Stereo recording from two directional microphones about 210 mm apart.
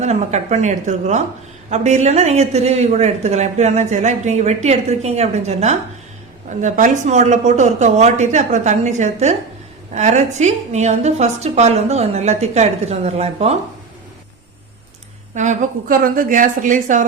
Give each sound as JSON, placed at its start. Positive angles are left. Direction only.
{"t": 0.0, "sound": "speech", "side_deg": -30}
{"t": 15.4, "sound": "speech", "side_deg": -40}